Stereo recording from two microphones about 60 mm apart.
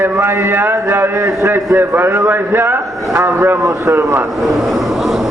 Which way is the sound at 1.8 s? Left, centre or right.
Right.